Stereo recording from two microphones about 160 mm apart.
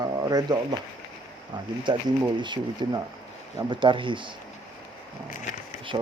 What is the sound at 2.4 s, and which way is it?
Speech, 30° right (ahead or behind).